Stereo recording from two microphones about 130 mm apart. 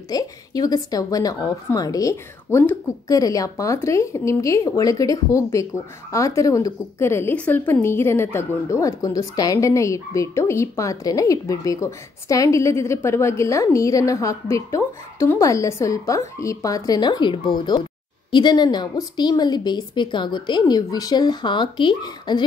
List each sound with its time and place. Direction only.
0.1 s a woman's voice: 30° left (ahead or behind)